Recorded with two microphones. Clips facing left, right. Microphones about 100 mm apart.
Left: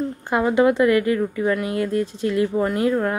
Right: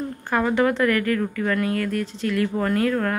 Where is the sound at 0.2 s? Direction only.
20° left (ahead or behind).